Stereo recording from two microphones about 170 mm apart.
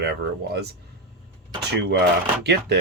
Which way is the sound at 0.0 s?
70° right (ahead or behind).